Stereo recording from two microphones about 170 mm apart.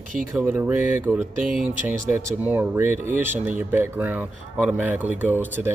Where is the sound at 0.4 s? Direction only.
10° right (ahead or behind).